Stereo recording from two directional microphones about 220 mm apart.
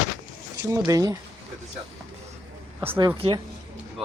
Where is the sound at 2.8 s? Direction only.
10° right (ahead or behind).